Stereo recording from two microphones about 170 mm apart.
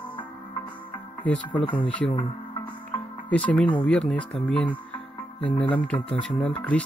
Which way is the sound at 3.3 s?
5° left (ahead or behind).